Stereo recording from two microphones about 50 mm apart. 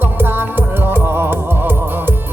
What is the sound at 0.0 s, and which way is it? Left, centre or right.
Music, right.